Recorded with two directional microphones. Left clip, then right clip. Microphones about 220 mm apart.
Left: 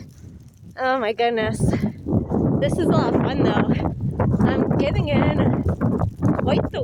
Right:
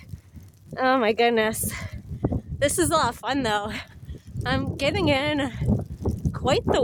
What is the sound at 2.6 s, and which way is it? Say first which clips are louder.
Speech: right 1 dB; 25° right (ahead or behind).